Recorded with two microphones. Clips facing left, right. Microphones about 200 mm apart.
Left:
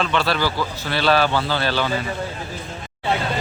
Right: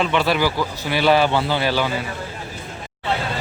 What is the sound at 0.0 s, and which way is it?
A man's voice, 15° right (ahead or behind).